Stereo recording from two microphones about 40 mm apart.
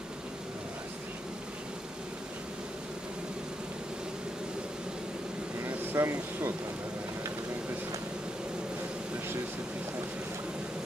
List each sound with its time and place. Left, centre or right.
5.9 s speech: right